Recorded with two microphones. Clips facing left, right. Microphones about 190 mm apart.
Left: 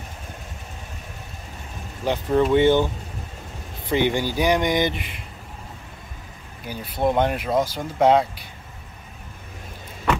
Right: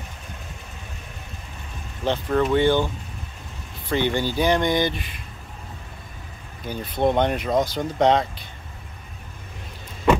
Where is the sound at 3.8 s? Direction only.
15° left (ahead or behind).